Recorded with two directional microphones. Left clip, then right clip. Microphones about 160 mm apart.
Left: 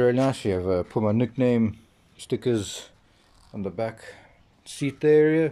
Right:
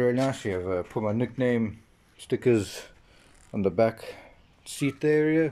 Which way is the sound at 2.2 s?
5° right (ahead or behind).